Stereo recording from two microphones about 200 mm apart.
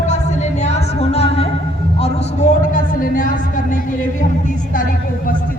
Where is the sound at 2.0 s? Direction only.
40° left (ahead or behind).